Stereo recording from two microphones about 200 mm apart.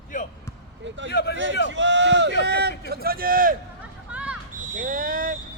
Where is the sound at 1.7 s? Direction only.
65° right (ahead or behind); by 3.6 s 45° right (ahead or behind).